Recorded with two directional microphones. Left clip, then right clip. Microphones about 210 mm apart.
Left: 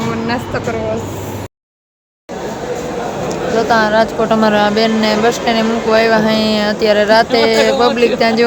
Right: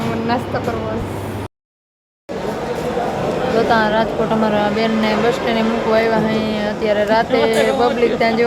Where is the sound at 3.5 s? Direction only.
10° left (ahead or behind).